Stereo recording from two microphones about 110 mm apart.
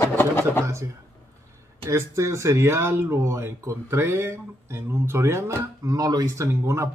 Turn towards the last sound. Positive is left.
turn(degrees=-25)  # may be behind; listen again after turning